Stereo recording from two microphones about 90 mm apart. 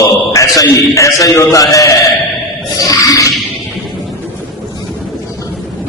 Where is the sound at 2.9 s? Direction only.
35° left (ahead or behind).